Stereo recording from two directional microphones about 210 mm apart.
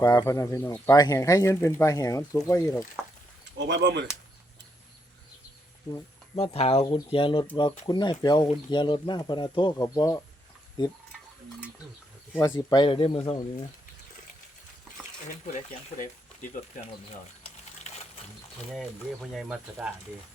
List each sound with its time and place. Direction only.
0.0 s speech: 15° left (ahead or behind)
3.6 s speech: 55° right (ahead or behind)
5.9 s speech: 30° left (ahead or behind)
12.3 s speech: 15° left (ahead or behind)
15.5 s speech: 35° left (ahead or behind)
17.4 s a sound: 30° left (ahead or behind)
19.3 s speech: centre (ahead or behind)